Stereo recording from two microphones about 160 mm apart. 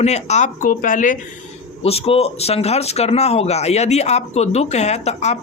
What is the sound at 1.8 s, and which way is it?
Speech, 40° left (ahead or behind).